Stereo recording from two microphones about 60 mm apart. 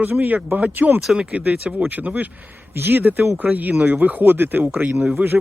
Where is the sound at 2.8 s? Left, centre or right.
Right.